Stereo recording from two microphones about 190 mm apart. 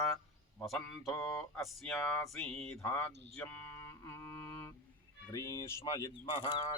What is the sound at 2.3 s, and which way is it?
Speech, 5° left (ahead or behind).